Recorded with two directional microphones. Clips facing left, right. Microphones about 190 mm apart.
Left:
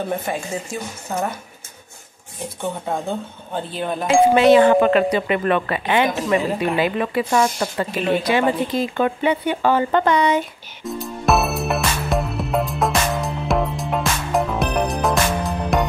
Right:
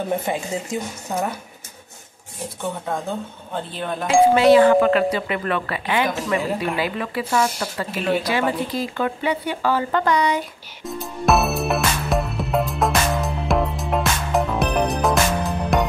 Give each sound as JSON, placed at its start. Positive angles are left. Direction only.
{"t": 0.3, "sound": "speech", "side_deg": -15}
{"t": 2.6, "sound": "speech", "side_deg": 5}
{"t": 4.3, "sound": "speech", "side_deg": 20}
{"t": 10.9, "sound": "music", "side_deg": 0}